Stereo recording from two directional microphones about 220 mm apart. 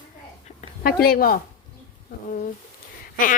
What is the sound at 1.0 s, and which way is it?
Speech, 40° left (ahead or behind).